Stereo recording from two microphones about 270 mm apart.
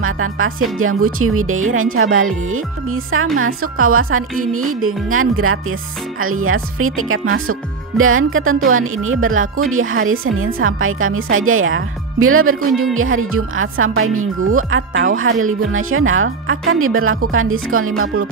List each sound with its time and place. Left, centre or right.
0.0 s speech: right